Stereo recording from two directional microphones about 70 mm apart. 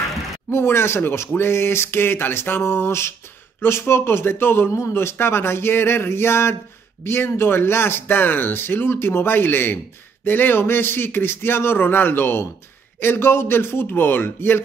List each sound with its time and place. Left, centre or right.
0.5 s speech: left